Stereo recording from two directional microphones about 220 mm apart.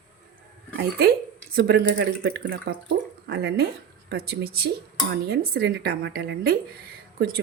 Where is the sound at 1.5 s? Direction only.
45° right (ahead or behind).